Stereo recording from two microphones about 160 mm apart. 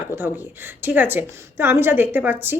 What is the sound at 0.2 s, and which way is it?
A woman's voice, 10° right (ahead or behind).